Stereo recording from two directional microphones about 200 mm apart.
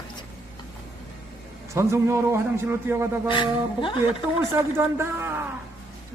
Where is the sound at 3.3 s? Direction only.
25° left (ahead or behind).